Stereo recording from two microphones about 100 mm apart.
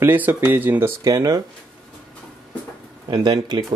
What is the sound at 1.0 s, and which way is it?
Speech, 35° right (ahead or behind).